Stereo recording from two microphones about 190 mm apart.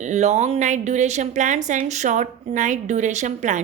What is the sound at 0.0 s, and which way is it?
A woman's voice, 35° right (ahead or behind).